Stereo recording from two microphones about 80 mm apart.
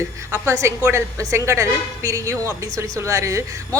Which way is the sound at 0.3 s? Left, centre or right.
Right.